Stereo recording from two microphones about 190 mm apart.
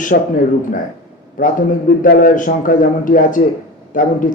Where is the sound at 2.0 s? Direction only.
50° left (ahead or behind).